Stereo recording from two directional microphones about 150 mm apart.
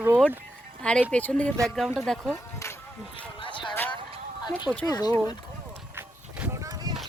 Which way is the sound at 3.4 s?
35° left (ahead or behind).